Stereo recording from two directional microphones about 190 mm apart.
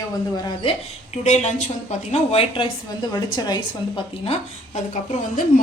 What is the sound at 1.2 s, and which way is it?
A woman's voice, 35° left (ahead or behind).